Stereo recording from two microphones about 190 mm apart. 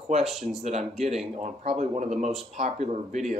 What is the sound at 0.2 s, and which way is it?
Speech, centre (ahead or behind).